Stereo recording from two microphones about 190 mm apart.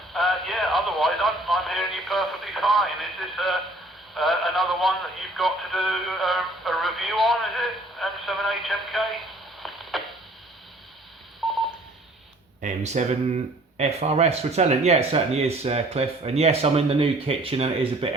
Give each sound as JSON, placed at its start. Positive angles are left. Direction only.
{"t": 0.1, "sound": "speech", "side_deg": 0}
{"t": 12.6, "sound": "speech", "side_deg": -35}